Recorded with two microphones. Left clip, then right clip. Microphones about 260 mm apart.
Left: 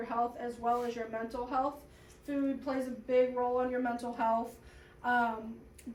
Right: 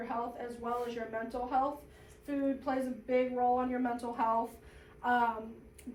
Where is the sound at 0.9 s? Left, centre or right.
Centre.